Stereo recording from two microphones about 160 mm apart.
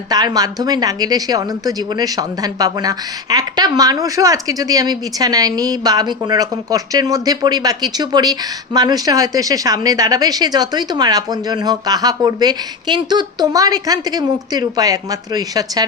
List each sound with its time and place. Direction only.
0.1 s a woman's voice: 25° right (ahead or behind)